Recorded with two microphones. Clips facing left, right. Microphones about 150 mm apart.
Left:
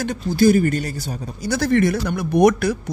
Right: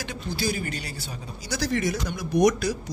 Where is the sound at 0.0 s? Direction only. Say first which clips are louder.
Left 13 dB; 50° left (ahead or behind).